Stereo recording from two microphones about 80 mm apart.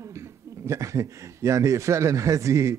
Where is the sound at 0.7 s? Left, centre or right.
Right.